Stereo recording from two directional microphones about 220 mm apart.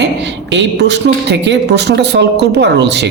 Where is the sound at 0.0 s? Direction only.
55° right (ahead or behind).